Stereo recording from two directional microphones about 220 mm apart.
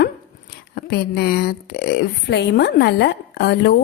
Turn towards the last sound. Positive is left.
turn(degrees=50)  # may be behind; listen again after turning